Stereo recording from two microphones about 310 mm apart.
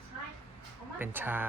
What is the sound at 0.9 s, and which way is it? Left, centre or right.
Speech, centre.